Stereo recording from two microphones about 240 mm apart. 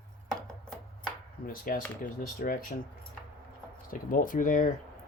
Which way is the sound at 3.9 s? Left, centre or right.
Left.